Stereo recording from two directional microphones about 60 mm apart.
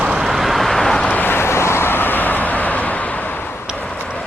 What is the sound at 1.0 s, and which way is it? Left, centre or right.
Vehicle, left.